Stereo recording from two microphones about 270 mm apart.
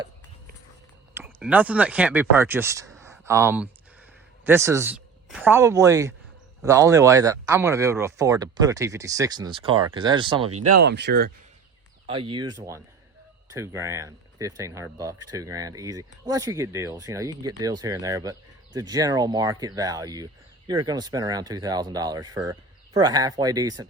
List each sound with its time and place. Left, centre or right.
1.1 s speech: centre
3.0 s a sound: centre
4.4 s speech: centre
10.5 s speech: right
10.8 s speech: right
12.0 s speech: centre